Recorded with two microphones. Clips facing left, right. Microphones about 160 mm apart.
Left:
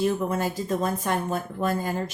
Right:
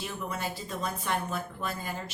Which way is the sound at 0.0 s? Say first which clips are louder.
Left 11 dB; 45° left (ahead or behind).